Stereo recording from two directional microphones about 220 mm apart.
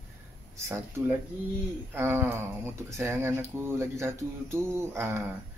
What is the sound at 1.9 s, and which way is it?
Speech, 10° right (ahead or behind).